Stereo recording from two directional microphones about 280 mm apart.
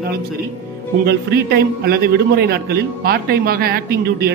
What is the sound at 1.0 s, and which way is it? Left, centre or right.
A man's voice, right.